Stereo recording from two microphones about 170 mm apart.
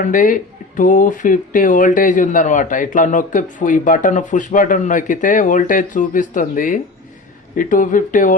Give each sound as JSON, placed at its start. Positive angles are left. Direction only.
{"t": 0.0, "sound": "speech", "side_deg": 50}